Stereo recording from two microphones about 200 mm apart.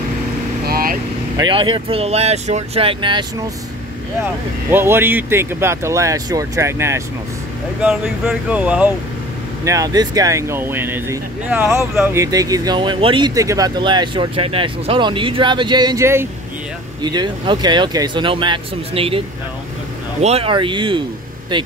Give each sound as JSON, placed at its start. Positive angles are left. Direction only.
{"t": 0.7, "sound": "vehicle", "side_deg": -45}
{"t": 1.4, "sound": "speech", "side_deg": -25}
{"t": 4.6, "sound": "speech", "side_deg": -10}
{"t": 9.7, "sound": "speech", "side_deg": -15}